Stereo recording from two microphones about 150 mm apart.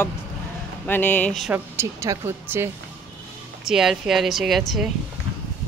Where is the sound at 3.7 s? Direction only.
5° right (ahead or behind).